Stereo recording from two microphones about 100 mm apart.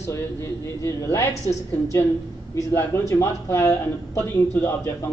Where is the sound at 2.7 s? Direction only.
25° left (ahead or behind).